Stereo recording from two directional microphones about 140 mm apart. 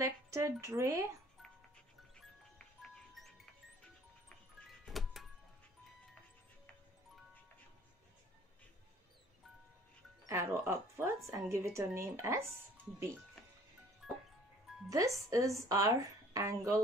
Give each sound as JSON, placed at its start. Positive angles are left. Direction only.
{"t": 0.0, "sound": "speech", "side_deg": -20}
{"t": 3.2, "sound": "music", "side_deg": 0}
{"t": 4.6, "sound": "music", "side_deg": 0}
{"t": 10.2, "sound": "a woman's voice", "side_deg": -20}
{"t": 14.0, "sound": "music", "side_deg": 0}
{"t": 14.9, "sound": "a woman's voice", "side_deg": -25}